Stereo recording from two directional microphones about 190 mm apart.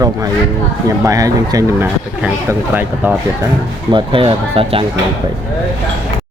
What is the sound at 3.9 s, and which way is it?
Speech, 30° right (ahead or behind).